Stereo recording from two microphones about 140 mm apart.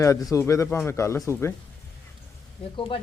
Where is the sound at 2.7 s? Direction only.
40° left (ahead or behind).